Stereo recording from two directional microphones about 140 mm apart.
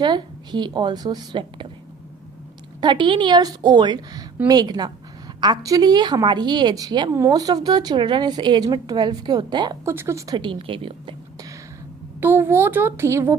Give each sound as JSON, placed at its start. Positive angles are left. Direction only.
{"t": 0.0, "sound": "speech", "side_deg": -30}
{"t": 2.8, "sound": "a woman's voice", "side_deg": -35}
{"t": 9.8, "sound": "speech", "side_deg": -20}
{"t": 12.2, "sound": "speech", "side_deg": -15}